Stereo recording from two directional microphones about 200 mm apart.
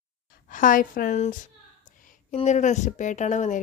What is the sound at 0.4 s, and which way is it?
Speech, 40° left (ahead or behind).